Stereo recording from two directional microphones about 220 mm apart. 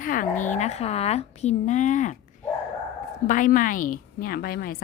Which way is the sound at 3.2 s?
35° left (ahead or behind).